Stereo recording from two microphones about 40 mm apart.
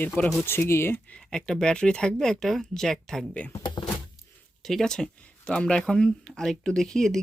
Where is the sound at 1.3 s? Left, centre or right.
Centre.